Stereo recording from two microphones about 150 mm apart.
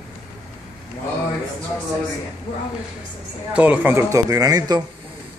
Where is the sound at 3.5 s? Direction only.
10° right (ahead or behind); by 4.8 s 25° right (ahead or behind).